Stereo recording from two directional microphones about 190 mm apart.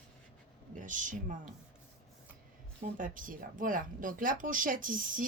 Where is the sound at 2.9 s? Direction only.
45° right (ahead or behind).